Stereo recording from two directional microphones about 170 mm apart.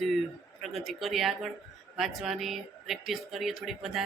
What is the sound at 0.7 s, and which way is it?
Speech, centre (ahead or behind).